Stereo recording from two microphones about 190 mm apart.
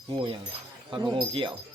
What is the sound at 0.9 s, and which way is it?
Speech, 25° right (ahead or behind).